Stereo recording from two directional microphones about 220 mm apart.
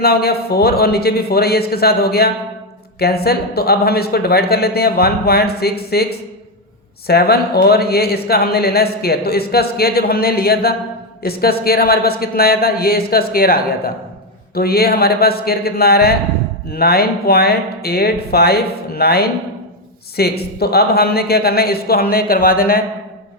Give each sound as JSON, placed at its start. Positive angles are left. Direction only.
{"t": 0.0, "sound": "speech", "side_deg": 45}